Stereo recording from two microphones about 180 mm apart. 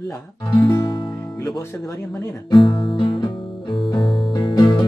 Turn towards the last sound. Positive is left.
turn(degrees=25)  # may be behind; listen again after turning